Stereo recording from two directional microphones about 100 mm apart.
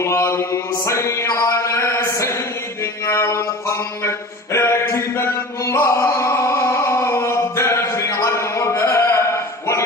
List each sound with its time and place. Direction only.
0.0 s mantra: 25° left (ahead or behind)
3.1 s music: 30° left (ahead or behind)
4.5 s a sound: 25° left (ahead or behind)